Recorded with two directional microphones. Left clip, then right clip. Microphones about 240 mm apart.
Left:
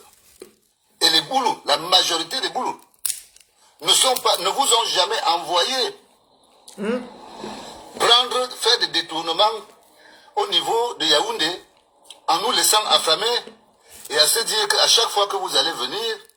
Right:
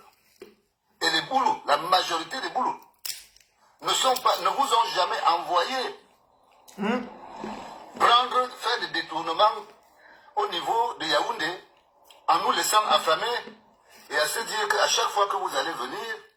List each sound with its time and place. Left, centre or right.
1.0 s a man's voice: left
3.8 s a man's voice: left
6.7 s speech: centre
7.3 s speech: left